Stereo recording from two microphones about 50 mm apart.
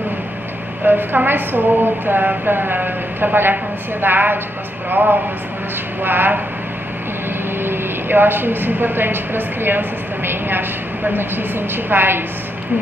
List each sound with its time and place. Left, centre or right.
0.8 s a woman's voice: right
7.6 s a woman's voice: right